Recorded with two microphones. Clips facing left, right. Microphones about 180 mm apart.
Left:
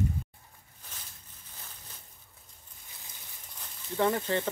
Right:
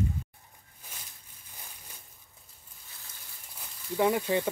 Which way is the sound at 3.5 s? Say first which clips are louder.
Right 1 dB; 10° right (ahead or behind).